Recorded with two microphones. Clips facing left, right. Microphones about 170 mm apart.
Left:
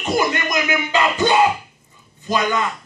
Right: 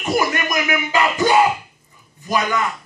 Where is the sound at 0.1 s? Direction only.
25° left (ahead or behind).